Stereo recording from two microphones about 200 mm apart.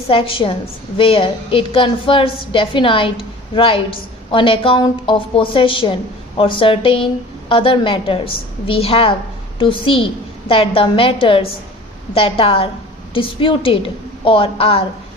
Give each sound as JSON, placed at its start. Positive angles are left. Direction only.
{"t": 0.1, "sound": "a woman's voice", "side_deg": 25}